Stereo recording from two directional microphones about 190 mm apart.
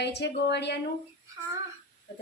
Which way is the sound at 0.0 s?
60° left (ahead or behind).